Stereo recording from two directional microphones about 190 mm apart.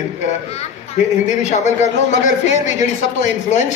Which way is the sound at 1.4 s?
35° left (ahead or behind).